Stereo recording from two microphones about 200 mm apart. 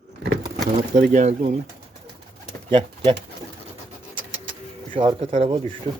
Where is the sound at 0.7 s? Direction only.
40° right (ahead or behind).